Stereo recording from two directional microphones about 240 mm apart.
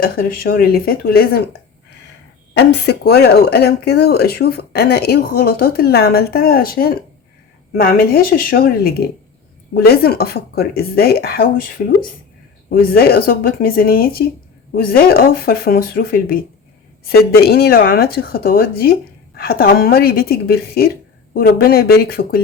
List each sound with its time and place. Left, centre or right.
0.0 s speech: left